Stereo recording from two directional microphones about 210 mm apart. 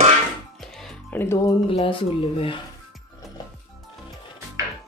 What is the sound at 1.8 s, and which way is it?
Speech, 25° left (ahead or behind).